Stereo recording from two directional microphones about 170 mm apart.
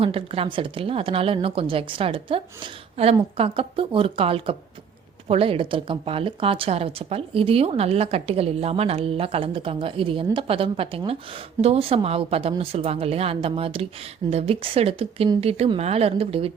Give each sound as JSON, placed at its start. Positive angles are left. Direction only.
{"t": 0.0, "sound": "a woman's voice", "side_deg": -35}